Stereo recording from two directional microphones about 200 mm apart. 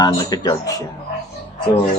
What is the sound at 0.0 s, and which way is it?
Speech, 20° left (ahead or behind).